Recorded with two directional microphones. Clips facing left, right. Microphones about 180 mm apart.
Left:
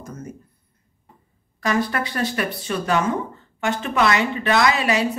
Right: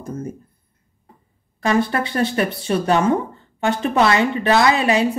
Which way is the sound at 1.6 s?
30° right (ahead or behind).